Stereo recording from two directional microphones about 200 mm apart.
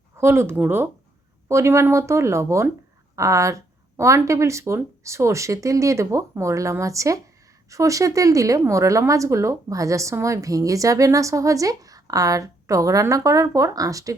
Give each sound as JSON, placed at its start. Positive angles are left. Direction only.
{"t": 0.2, "sound": "speech", "side_deg": -10}